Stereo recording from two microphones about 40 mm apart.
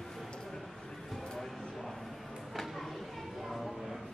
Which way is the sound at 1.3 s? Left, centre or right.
Centre.